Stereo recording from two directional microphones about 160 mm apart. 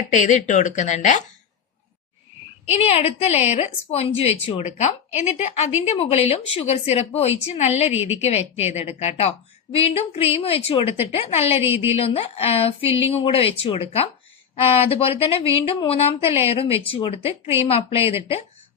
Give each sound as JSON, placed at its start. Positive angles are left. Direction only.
{"t": 0.1, "sound": "speech", "side_deg": 50}
{"t": 2.6, "sound": "a woman's voice", "side_deg": 40}